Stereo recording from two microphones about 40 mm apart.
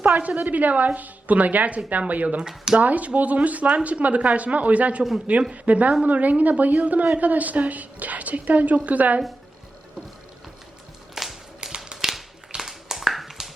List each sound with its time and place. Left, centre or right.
0.2 s a woman's voice: right
2.4 s speech: centre
2.7 s a woman's voice: right
5.6 s a woman's voice: right
11.1 s a sound: centre
11.9 s typewriter: centre
12.6 s a sound: centre